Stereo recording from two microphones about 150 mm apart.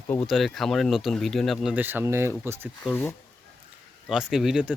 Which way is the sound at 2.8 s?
15° left (ahead or behind).